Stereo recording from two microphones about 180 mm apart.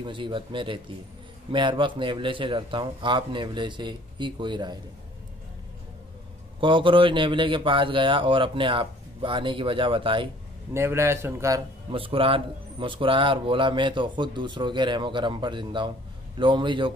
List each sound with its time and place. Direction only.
0.0 s a man's voice: 25° right (ahead or behind)
6.6 s a man's voice: 25° right (ahead or behind)
10.7 s a man's voice: 15° right (ahead or behind)
11.9 s a man's voice: 30° right (ahead or behind)